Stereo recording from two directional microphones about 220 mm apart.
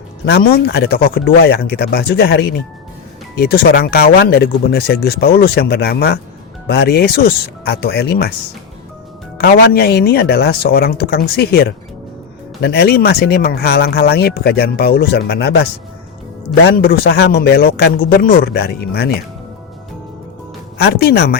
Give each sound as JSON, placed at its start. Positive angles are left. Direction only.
{"t": 0.3, "sound": "speech", "side_deg": 45}
{"t": 9.4, "sound": "speech", "side_deg": 45}
{"t": 20.7, "sound": "speech", "side_deg": 45}